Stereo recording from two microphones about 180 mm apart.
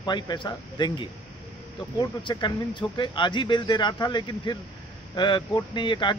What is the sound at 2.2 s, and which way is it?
Speech, 25° left (ahead or behind).